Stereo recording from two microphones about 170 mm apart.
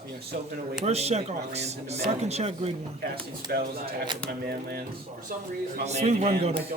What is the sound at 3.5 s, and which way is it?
Speech, 65° right (ahead or behind).